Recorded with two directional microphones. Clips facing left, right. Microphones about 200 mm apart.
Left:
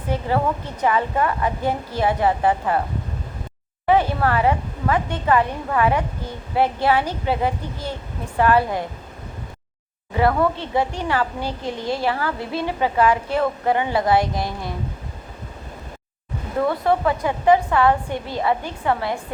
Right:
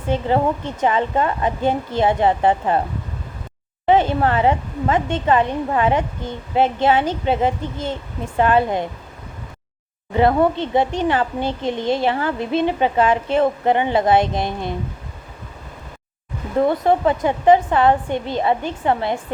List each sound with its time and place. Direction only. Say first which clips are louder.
0.1 s a woman's voice: right 3 dB; 25° right (ahead or behind)
3.8 s a woman's voice: right 2 dB; 25° right (ahead or behind)
10.2 s a woman's voice: right 3 dB; 25° right (ahead or behind)
16.6 s a woman's voice: right 3 dB; 20° right (ahead or behind)